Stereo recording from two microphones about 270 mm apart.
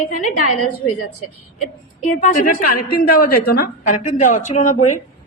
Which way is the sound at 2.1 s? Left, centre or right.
Left.